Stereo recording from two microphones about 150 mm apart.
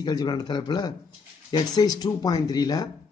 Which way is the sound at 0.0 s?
30° left (ahead or behind).